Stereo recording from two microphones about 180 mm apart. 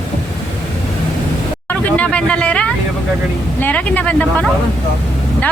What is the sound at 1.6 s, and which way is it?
Speech, 5° left (ahead or behind).